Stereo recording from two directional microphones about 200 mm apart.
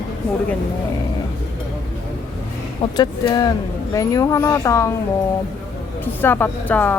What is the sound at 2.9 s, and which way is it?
A woman's voice, 20° left (ahead or behind).